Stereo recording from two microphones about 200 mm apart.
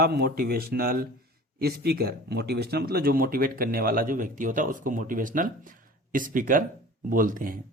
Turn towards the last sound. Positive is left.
turn(degrees=-45)  # may be behind; listen again after turning